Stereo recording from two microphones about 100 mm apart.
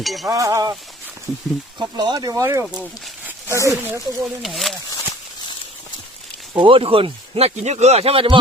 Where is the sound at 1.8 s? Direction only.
40° right (ahead or behind).